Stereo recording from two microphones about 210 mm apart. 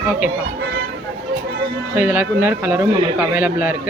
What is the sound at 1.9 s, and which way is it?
Speech, 5° right (ahead or behind).